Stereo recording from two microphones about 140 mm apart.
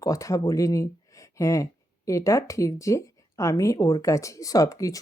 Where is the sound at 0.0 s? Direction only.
25° left (ahead or behind).